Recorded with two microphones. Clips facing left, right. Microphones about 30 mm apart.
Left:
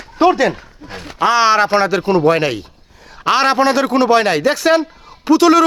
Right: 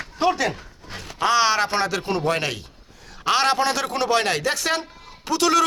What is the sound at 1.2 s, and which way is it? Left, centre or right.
A man's voice, left.